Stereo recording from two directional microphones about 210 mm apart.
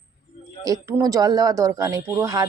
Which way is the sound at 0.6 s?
15° right (ahead or behind).